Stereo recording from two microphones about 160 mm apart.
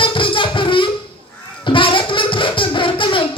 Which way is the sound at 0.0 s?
30° left (ahead or behind).